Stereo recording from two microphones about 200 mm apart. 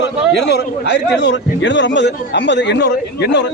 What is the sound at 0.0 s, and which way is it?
A man's voice, 60° left (ahead or behind).